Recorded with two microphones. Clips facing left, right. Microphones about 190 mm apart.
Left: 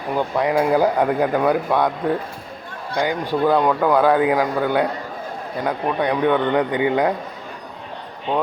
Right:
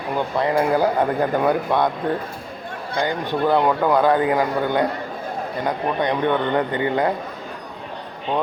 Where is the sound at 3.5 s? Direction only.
5° right (ahead or behind).